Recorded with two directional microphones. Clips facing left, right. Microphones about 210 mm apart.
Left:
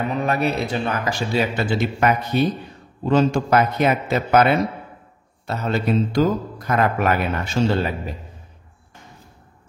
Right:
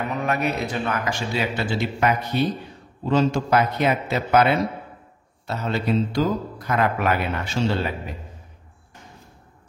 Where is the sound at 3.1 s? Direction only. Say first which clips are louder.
Left 2 dB; 50° left (ahead or behind).